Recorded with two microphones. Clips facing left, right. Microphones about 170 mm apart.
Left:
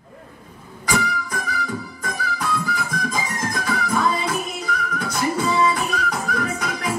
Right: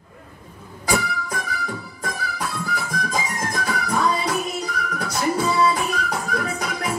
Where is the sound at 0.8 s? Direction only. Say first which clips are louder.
Even; 35° right (ahead or behind).